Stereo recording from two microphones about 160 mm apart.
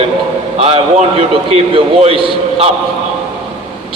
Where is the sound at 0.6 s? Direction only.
40° right (ahead or behind).